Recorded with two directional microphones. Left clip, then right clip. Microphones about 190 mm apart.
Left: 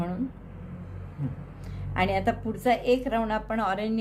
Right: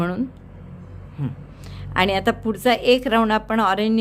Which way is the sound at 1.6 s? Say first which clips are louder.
Right 7 dB; 40° right (ahead or behind).